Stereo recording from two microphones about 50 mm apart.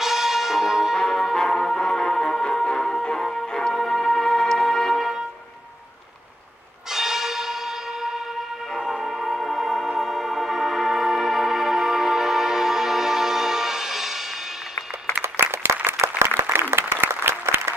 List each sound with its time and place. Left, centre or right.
0.0 s brass instrument: centre
1.3 s music: centre
6.9 s church bell: centre
8.8 s music: centre
15.6 s applause: right
16.0 s applause: right
16.7 s applause: right